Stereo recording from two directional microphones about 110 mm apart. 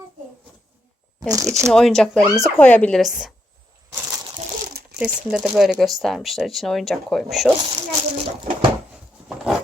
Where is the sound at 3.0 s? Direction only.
5° right (ahead or behind).